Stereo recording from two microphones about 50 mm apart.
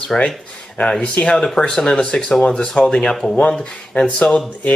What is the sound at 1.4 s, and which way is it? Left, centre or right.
Speech, centre.